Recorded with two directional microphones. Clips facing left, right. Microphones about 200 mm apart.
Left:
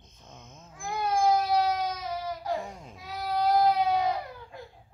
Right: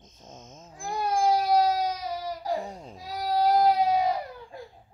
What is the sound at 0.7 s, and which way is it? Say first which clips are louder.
Baby cry: right 1 dB; 35° right (ahead or behind).